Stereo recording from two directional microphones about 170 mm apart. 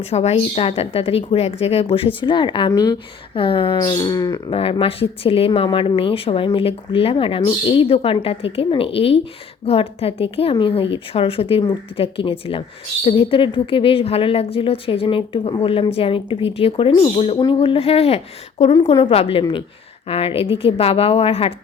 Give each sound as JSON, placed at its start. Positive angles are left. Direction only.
{"t": 0.0, "sound": "speech", "side_deg": 40}
{"t": 4.5, "sound": "speech", "side_deg": 35}